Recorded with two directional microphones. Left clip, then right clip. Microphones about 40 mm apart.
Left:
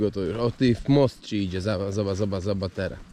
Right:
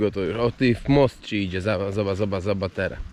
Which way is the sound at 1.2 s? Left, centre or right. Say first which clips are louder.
Right 2 dB; right.